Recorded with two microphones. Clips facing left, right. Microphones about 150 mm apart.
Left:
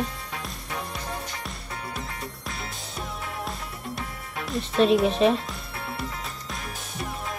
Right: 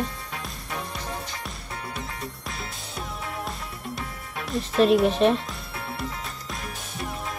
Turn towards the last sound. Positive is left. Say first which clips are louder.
# even
turn(degrees=0)  # may be behind; listen again after turning